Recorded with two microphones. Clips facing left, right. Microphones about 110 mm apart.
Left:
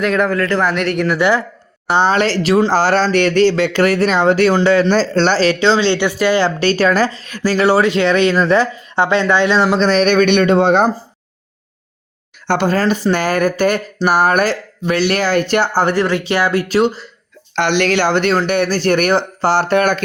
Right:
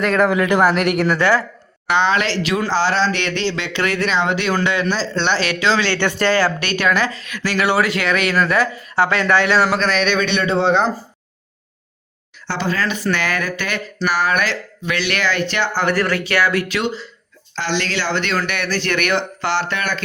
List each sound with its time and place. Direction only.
0.0 s speech: centre (ahead or behind)
0.3 s speech: 15° right (ahead or behind)
0.7 s speech: 5° right (ahead or behind)
1.2 s speech: 15° left (ahead or behind)
1.9 s speech: 35° left (ahead or behind)
4.9 s speech: 45° left (ahead or behind); by 6.0 s 25° left (ahead or behind)
6.0 s speech: 10° left (ahead or behind)
6.4 s speech: 30° left (ahead or behind); by 10.9 s 50° left (ahead or behind)
12.5 s speech: 50° left (ahead or behind)
16.0 s speech: 25° left (ahead or behind)
17.5 s speech: 60° left (ahead or behind)
18.3 s speech: 35° left (ahead or behind)